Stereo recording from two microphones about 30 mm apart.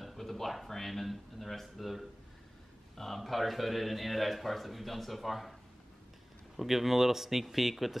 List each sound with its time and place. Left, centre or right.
0.0 s speech: centre
3.2 s a man's voice: centre